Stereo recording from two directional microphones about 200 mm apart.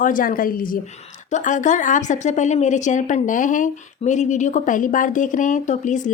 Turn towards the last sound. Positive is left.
turn(degrees=40)  # may be behind; listen again after turning